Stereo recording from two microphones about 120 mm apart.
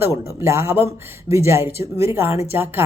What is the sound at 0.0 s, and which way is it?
A woman's voice, 20° right (ahead or behind).